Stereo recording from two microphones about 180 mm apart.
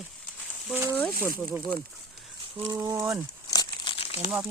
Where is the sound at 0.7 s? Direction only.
15° right (ahead or behind).